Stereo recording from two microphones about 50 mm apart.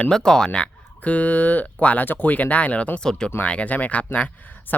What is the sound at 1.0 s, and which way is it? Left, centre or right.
Speech, left.